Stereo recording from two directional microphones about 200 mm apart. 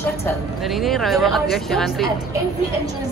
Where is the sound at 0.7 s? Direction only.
Centre (ahead or behind).